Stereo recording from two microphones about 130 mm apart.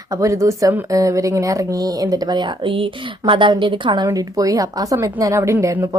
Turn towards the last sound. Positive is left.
turn(degrees=-25)  # may be behind; listen again after turning